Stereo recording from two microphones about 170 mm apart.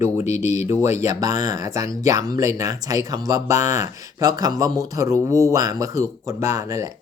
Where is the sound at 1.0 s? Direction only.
20° right (ahead or behind).